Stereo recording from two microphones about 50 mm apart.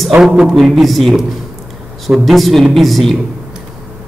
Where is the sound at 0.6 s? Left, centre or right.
Centre.